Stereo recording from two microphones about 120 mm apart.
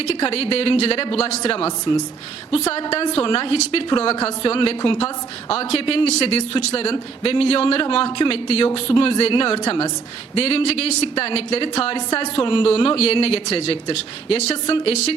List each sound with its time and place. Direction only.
0.1 s a woman's voice: 55° left (ahead or behind)
1.5 s a woman's voice: 50° left (ahead or behind)
2.5 s a woman's voice: 60° left (ahead or behind)
6.1 s speech: 65° left (ahead or behind)
6.9 s a woman's voice: 50° left (ahead or behind)